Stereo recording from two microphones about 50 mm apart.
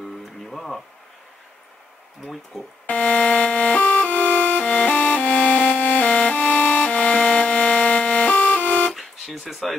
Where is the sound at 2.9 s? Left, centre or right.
Left.